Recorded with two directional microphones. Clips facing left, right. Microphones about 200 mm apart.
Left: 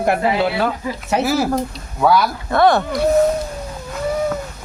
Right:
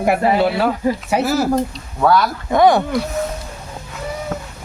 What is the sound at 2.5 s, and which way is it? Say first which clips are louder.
Speech: right 2 dB; 15° right (ahead or behind).